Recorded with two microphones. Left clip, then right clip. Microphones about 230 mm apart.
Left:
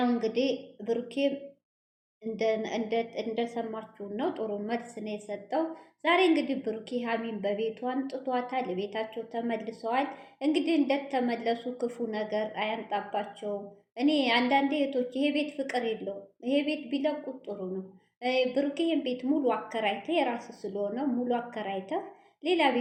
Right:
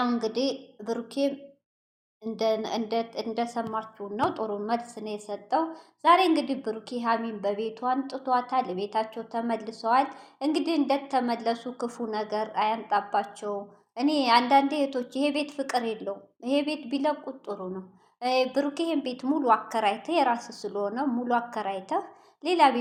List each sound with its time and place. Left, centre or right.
0.1 s a woman's voice: centre